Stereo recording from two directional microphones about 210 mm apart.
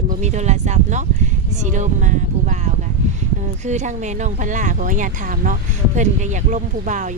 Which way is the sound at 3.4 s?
35° right (ahead or behind).